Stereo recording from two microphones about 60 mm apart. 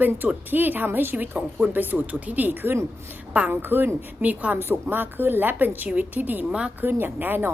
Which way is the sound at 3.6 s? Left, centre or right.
Right.